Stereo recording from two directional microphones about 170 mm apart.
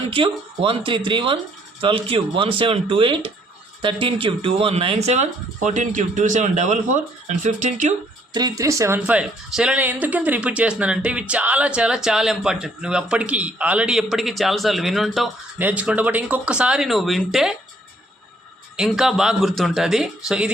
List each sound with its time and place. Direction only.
0.1 s speech: 30° right (ahead or behind)
8.3 s speech: 25° right (ahead or behind)
9.0 s speech: 5° right (ahead or behind)
18.8 s speech: 5° right (ahead or behind)